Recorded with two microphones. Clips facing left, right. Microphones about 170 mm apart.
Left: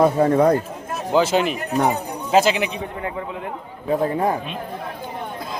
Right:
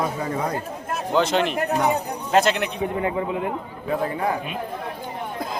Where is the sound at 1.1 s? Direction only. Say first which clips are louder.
Left 2 dB; 5° left (ahead or behind).